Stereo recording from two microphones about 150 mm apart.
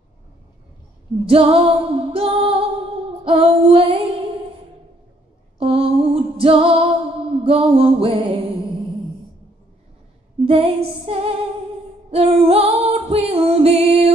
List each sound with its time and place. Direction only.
1.2 s music: 35° right (ahead or behind)
5.6 s music: 40° right (ahead or behind)
10.4 s music: 40° right (ahead or behind)